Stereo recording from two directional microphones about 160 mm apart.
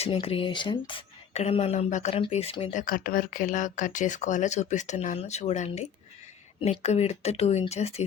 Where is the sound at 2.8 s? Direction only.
60° left (ahead or behind); by 8.0 s 40° left (ahead or behind).